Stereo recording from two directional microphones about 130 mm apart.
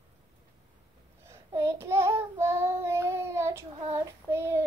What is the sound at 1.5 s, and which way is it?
Child singing, 25° right (ahead or behind).